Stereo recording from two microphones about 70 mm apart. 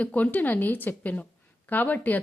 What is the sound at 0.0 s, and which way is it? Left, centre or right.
A woman's voice, left.